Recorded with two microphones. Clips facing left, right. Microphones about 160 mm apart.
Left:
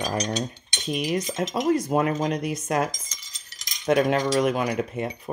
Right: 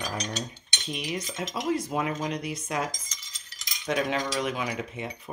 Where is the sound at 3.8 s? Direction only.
60° left (ahead or behind).